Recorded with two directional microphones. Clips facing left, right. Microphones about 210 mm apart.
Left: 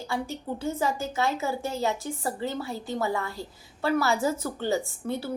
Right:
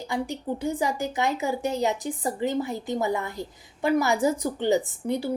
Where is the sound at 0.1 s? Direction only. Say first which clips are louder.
Right 3 dB; 15° right (ahead or behind).